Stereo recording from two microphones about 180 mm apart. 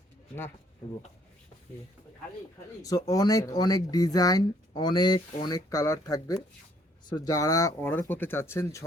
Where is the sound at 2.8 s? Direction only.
20° left (ahead or behind).